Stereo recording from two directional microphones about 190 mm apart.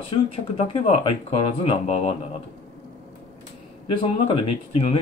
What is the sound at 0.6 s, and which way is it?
Speech, 30° left (ahead or behind).